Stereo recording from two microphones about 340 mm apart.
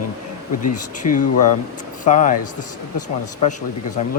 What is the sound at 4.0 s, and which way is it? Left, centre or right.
Speech, left.